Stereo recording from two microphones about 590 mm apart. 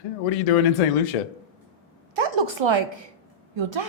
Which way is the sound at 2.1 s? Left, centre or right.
Right.